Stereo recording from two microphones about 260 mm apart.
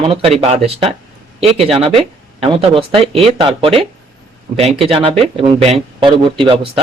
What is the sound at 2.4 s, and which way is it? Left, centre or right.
Speech, right.